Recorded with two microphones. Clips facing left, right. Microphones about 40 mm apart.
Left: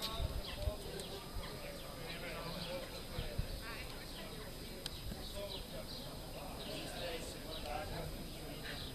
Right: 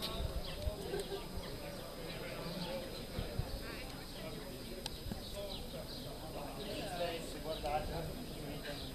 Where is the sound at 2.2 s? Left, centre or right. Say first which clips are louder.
Right 1 dB; centre.